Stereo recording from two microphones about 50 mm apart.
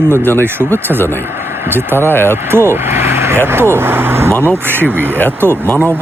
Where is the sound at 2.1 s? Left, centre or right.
Left.